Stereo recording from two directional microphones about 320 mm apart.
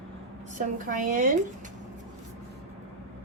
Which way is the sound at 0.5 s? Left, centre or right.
Right.